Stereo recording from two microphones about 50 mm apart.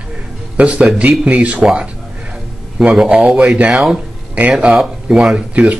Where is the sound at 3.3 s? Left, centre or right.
Right.